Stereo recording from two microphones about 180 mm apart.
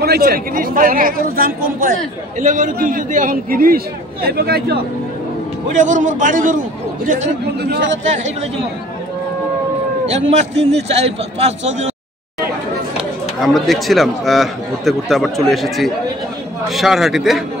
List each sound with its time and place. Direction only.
0.0 s a man's voice: 60° right (ahead or behind)
5.7 s a man's voice: 45° right (ahead or behind)
7.7 s speech: 90° right
8.0 s a man's voice: 40° right (ahead or behind)
10.6 s a man's voice: 35° right (ahead or behind)
13.4 s speech: centre (ahead or behind)